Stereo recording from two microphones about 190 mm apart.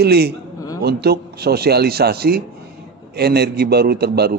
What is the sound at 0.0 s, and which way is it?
A man's voice, 55° right (ahead or behind).